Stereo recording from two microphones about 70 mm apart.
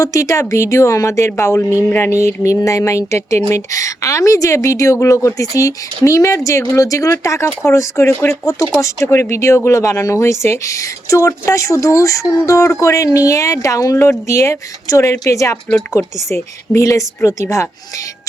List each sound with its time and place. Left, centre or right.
0.0 s speech: left
8.3 s speech: left
9.0 s speech: left